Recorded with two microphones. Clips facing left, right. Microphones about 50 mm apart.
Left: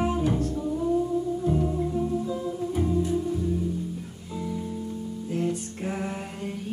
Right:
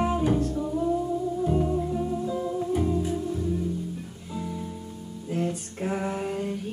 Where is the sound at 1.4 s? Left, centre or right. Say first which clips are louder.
Right 2 dB; centre.